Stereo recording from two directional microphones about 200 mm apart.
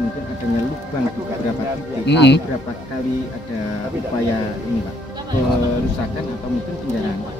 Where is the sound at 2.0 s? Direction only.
60° left (ahead or behind).